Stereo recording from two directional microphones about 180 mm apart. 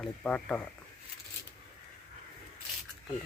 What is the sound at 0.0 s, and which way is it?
Speech, 5° left (ahead or behind).